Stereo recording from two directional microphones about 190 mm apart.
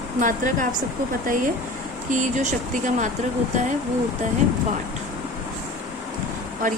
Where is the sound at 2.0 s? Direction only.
40° right (ahead or behind).